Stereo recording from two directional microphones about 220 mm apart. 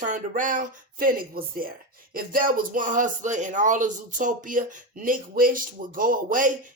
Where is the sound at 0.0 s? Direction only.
35° right (ahead or behind).